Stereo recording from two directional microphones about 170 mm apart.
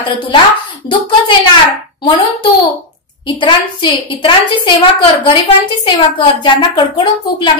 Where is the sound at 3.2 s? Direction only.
30° left (ahead or behind).